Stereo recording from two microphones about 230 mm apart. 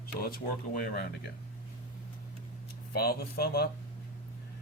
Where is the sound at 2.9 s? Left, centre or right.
Left.